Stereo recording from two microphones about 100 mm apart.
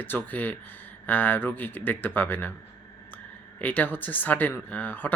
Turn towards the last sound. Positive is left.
turn(degrees=15)  # may be behind; listen again after turning